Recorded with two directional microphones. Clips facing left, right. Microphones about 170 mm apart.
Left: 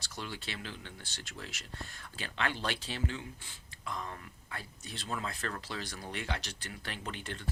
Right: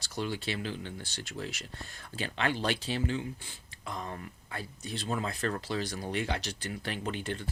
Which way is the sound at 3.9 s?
35° right (ahead or behind).